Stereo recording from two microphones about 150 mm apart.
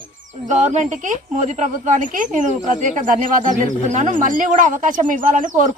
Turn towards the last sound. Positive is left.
turn(degrees=-60)  # may be behind; listen again after turning